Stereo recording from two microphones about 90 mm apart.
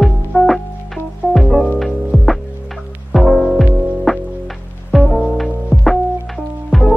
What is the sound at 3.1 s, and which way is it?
Music, centre (ahead or behind).